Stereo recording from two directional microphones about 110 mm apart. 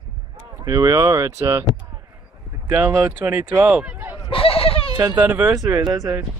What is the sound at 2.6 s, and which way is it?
Speech, 15° right (ahead or behind).